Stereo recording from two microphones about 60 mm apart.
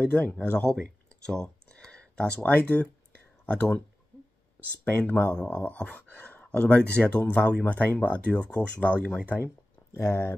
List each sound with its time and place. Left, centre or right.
0.3 s speech: left
1.2 s a sound: centre
2.5 s speech: left
4.8 s speech: left
5.3 s speech: centre
9.9 s speech: left